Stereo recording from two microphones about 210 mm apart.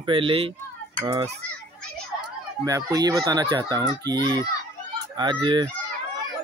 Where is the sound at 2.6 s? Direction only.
15° right (ahead or behind).